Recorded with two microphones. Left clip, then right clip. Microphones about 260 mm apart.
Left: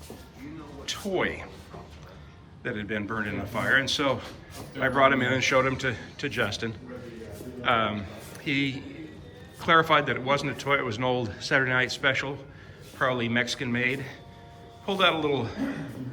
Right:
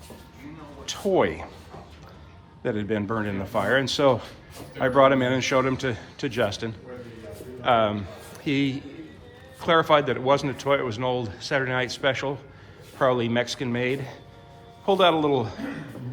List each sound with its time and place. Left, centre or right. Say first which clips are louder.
0.9 s speech: right 6 dB; centre
2.6 s a man's voice: right 5 dB; centre